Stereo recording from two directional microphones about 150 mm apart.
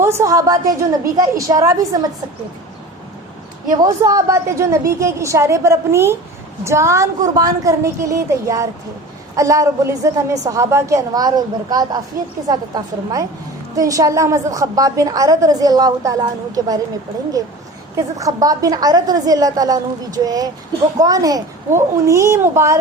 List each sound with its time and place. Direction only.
0.0 s a woman's voice: 20° right (ahead or behind)
3.7 s a woman's voice: 25° right (ahead or behind)